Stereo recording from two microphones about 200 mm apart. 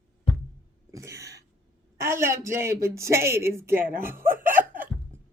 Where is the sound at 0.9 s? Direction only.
15° right (ahead or behind).